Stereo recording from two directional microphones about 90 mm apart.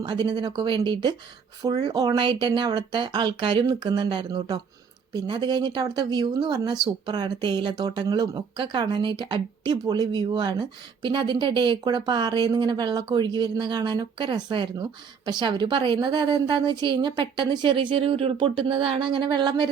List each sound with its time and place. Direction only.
0.0 s speech: 55° right (ahead or behind)
1.6 s speech: 50° right (ahead or behind)